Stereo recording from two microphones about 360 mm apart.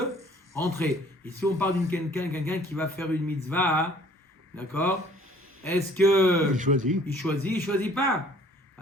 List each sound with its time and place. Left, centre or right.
0.5 s speech: centre
6.5 s a man's voice: right
7.2 s speech: centre